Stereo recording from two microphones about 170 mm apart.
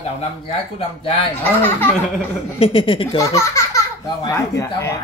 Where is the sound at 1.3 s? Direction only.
10° left (ahead or behind).